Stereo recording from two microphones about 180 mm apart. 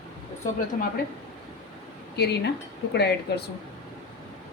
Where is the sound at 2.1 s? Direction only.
65° left (ahead or behind).